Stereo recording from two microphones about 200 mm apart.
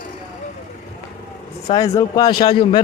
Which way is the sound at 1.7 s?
20° left (ahead or behind).